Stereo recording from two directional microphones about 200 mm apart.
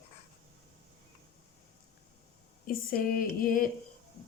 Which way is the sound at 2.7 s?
45° left (ahead or behind).